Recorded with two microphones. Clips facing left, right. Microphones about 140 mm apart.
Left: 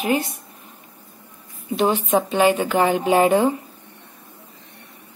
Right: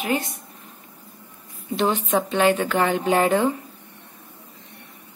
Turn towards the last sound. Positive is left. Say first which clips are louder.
# left 3 dB
turn(degrees=15)  # may be behind; listen again after turning